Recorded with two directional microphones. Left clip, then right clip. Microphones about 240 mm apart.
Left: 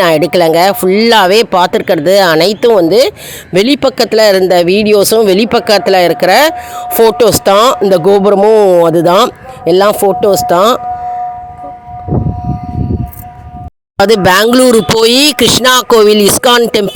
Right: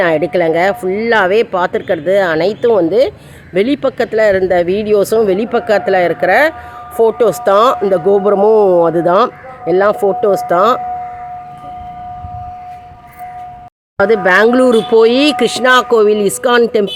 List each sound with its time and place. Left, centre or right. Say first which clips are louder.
0.0 s speech: left 4 dB; left
14.0 s speech: left 2 dB; left